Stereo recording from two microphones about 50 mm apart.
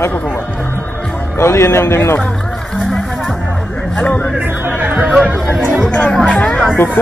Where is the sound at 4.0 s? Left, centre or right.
Left.